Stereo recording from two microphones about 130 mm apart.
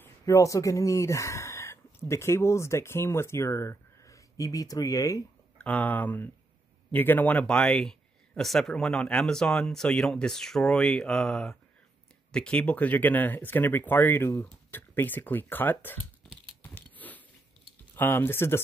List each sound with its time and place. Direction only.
0.2 s speech: 25° left (ahead or behind)
5.6 s speech: 10° left (ahead or behind)
16.7 s biting: 15° left (ahead or behind)
17.9 s speech: 15° left (ahead or behind)